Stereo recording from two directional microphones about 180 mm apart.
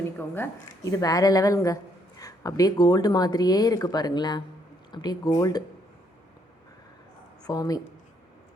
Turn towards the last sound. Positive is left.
turn(degrees=20)  # may be behind; listen again after turning